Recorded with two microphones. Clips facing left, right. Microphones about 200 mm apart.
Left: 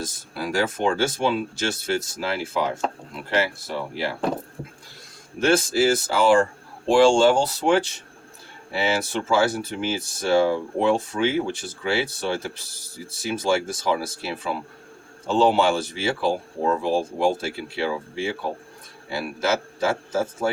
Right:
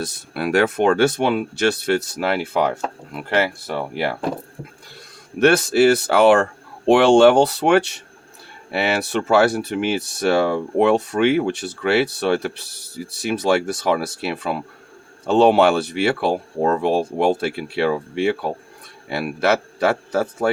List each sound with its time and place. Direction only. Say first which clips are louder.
0.0 s speech: right 5 dB; 65° right (ahead or behind)
5.4 s speech: right 5 dB; 65° right (ahead or behind)